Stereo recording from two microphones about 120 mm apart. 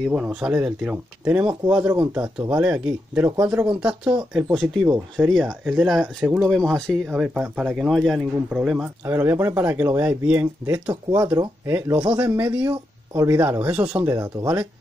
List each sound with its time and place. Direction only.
0.1 s speech: 5° right (ahead or behind)
6.5 s speech: 5° left (ahead or behind)
7.1 s speech: 10° right (ahead or behind)
9.0 s speech: 20° right (ahead or behind)